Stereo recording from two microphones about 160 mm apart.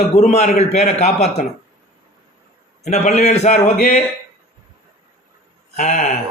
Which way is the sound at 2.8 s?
45° left (ahead or behind).